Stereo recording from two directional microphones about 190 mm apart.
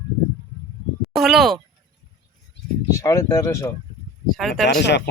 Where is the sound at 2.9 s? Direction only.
15° left (ahead or behind).